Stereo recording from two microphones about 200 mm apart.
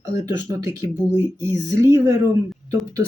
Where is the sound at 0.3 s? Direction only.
15° right (ahead or behind).